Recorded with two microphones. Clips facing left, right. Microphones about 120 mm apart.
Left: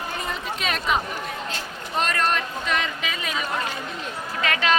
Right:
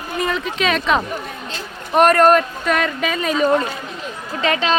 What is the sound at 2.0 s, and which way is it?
Speech, 50° right (ahead or behind).